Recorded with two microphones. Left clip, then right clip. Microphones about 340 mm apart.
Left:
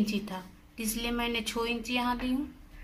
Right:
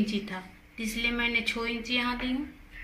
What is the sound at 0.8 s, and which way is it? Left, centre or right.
Speech, centre.